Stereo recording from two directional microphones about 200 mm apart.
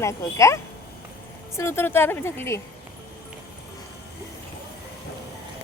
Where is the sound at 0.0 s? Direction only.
15° left (ahead or behind).